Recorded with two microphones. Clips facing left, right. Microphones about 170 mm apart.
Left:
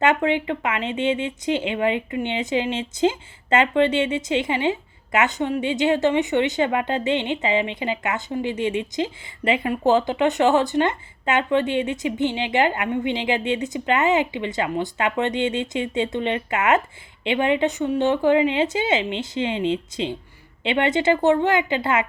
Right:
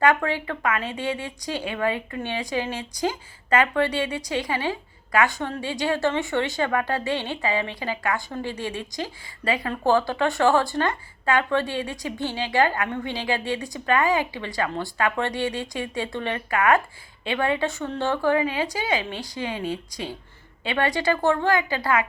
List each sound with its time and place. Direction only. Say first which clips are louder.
0.0 s speech: left 2 dB; 20° left (ahead or behind)